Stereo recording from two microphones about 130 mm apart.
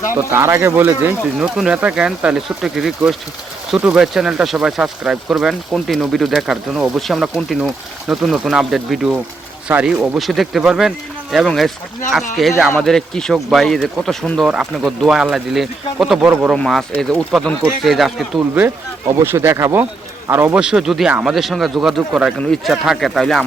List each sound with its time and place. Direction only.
0.1 s speech: 20° right (ahead or behind)
1.4 s speech: 5° right (ahead or behind)
16.6 s speech: centre (ahead or behind)
18.5 s speech: 15° right (ahead or behind)
20.6 s speech: 5° right (ahead or behind)